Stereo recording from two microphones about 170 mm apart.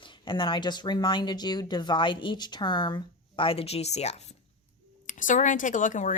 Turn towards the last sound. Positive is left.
turn(degrees=50)  # may be behind; listen again after turning